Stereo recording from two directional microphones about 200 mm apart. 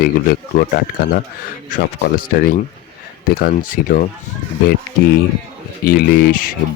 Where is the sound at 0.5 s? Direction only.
45° left (ahead or behind).